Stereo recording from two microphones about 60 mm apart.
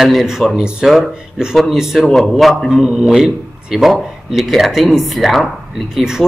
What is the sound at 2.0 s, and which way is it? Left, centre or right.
A man's voice, centre.